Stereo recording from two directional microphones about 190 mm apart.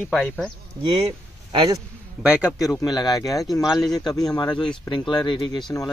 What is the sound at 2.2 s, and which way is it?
Speech, 5° right (ahead or behind).